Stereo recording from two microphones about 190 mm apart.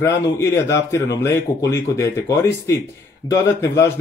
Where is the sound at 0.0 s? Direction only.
15° left (ahead or behind).